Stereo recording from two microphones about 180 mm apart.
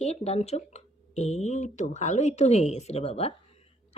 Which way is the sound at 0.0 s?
35° left (ahead or behind).